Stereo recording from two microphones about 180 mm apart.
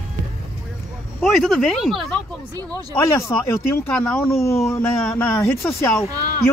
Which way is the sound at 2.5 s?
20° right (ahead or behind).